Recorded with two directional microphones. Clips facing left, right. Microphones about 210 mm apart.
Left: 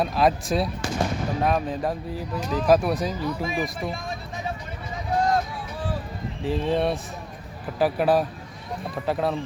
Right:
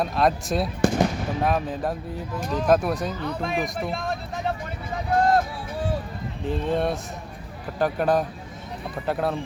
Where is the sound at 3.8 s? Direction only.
65° right (ahead or behind).